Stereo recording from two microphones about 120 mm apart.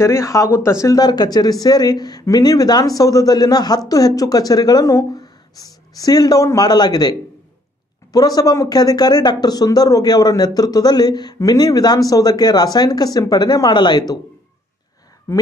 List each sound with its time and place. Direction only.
0.0 s speech: 25° left (ahead or behind)